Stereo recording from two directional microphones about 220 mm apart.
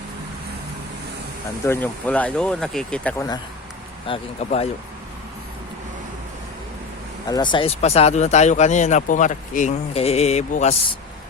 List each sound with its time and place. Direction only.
1.6 s speech: 10° left (ahead or behind)
4.0 s speech: 25° left (ahead or behind)
7.3 s speech: 20° left (ahead or behind)